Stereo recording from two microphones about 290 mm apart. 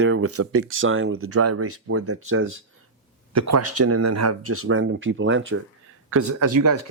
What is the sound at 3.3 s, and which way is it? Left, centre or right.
Speech, right.